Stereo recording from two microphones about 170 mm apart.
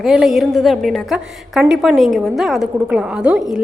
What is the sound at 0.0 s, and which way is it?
A woman's voice, 5° right (ahead or behind).